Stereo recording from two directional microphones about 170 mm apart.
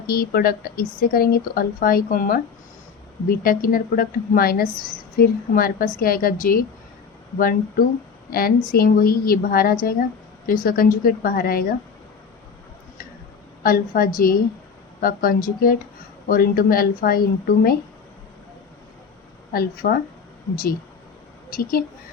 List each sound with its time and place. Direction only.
0.1 s a woman's voice: 65° left (ahead or behind)
13.6 s a woman's voice: 55° left (ahead or behind)
19.5 s a woman's voice: 65° left (ahead or behind)
21.5 s a woman's voice: 60° left (ahead or behind)